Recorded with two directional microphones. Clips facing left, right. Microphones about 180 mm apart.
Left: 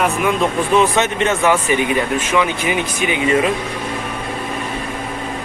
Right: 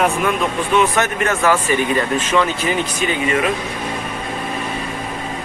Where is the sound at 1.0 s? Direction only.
20° left (ahead or behind).